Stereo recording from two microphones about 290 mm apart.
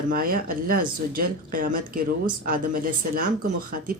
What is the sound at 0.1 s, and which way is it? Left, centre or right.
A woman's voice, right.